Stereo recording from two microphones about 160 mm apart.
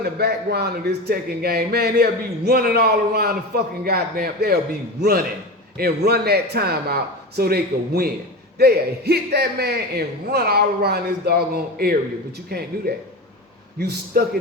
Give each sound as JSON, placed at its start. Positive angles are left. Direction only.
{"t": 0.0, "sound": "speech", "side_deg": -85}
{"t": 5.7, "sound": "speech", "side_deg": -80}
{"t": 8.5, "sound": "speech", "side_deg": -85}